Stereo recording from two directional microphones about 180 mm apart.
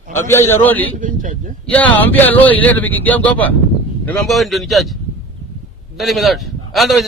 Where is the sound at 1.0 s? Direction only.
45° right (ahead or behind).